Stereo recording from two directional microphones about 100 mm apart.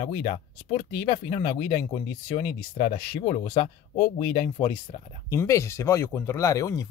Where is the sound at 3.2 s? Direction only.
80° left.